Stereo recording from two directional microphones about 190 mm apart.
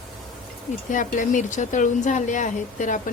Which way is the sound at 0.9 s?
45° left (ahead or behind).